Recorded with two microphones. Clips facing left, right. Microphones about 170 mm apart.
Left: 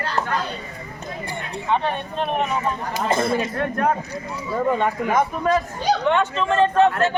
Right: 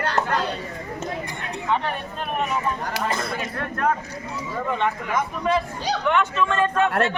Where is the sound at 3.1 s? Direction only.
25° left (ahead or behind).